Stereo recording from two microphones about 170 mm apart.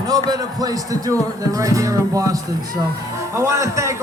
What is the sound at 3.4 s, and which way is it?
Speech, 15° right (ahead or behind).